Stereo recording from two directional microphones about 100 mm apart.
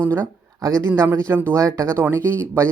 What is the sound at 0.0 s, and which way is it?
Speech, 25° right (ahead or behind).